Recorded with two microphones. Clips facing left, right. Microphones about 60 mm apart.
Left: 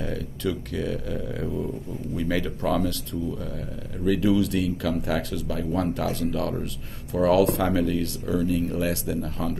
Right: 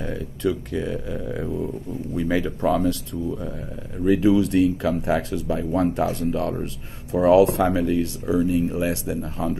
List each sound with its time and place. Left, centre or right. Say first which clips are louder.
0.0 s speech: right 3 dB; centre